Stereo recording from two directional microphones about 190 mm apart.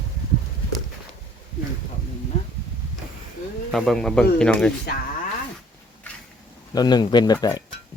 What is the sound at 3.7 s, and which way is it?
Speech, centre (ahead or behind).